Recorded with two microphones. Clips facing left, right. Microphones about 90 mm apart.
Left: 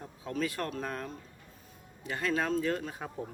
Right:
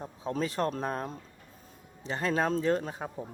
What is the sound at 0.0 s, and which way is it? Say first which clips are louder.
Speech: right 2 dB; 30° right (ahead or behind).